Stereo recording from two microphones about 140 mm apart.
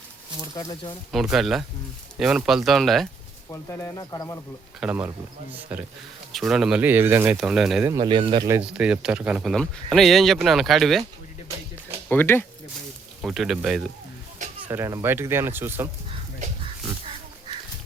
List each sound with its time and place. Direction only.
0.4 s speech: 30° left (ahead or behind)
1.1 s speech: centre (ahead or behind)
3.5 s speech: 20° left (ahead or behind)
4.8 s speech: 10° right (ahead or behind)
7.3 s speech: 5° right (ahead or behind)
7.9 s speech: 30° right (ahead or behind)
8.6 s speech: 5° right (ahead or behind)
12.0 s speech: 15° left (ahead or behind)
13.2 s speech: 5° right (ahead or behind)
14.7 s speech: 20° right (ahead or behind)